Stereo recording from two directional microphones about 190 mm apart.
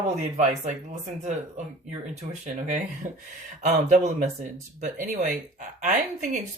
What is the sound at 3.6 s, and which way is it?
Speech, 40° right (ahead or behind).